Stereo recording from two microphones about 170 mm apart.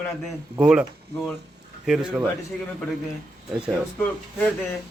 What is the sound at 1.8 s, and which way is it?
Speech, 5° right (ahead or behind).